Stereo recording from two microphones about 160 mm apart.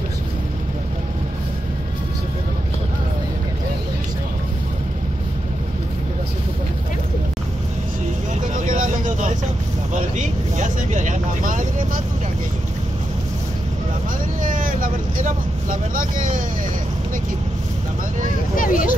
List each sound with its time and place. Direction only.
8.5 s vehicle: 55° right (ahead or behind)
14.4 s vehicle: 55° right (ahead or behind)
18.6 s a sound: 60° left (ahead or behind)